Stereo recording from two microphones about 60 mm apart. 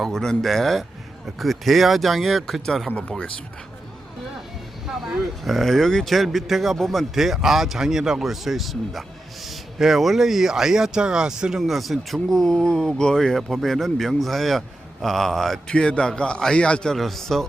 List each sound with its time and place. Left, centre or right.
0.0 s speech: centre
2.9 s a man's voice: centre
5.5 s speech: centre
15.7 s a man's voice: centre